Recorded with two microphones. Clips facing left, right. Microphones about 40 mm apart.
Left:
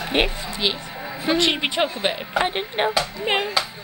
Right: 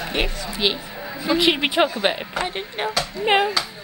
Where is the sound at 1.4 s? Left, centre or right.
Centre.